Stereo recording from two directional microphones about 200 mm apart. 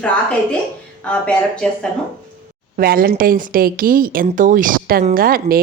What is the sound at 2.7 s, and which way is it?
Speech, 45° right (ahead or behind).